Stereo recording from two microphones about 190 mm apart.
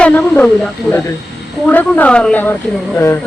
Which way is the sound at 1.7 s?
10° left (ahead or behind).